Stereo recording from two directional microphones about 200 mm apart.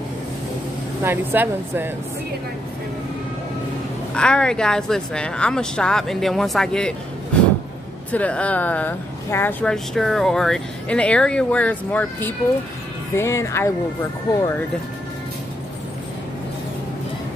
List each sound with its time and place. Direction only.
1.0 s speech: 10° right (ahead or behind)
4.1 s a woman's voice: 5° left (ahead or behind)
8.1 s speech: 5° left (ahead or behind)